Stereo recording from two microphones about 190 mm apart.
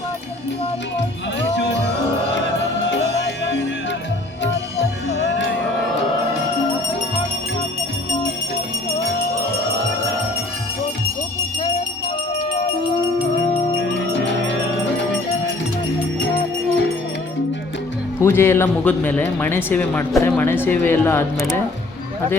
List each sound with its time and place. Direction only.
5.1 s music: 65° left (ahead or behind)
14.3 s music: 70° left (ahead or behind)
18.2 s speech: 15° left (ahead or behind)